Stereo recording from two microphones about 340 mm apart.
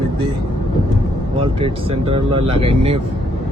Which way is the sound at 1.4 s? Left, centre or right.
Centre.